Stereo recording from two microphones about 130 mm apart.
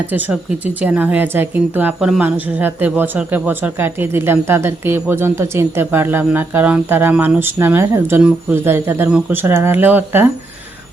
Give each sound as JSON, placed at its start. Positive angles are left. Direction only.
{"t": 0.8, "sound": "speech", "side_deg": -10}